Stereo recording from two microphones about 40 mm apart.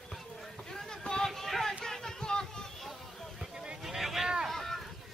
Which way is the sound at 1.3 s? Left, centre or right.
Centre.